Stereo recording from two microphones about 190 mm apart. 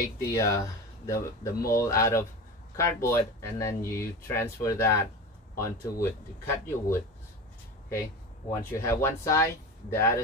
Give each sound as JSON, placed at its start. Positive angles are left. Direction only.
{"t": 0.2, "sound": "speech", "side_deg": 15}
{"t": 8.7, "sound": "speech", "side_deg": 15}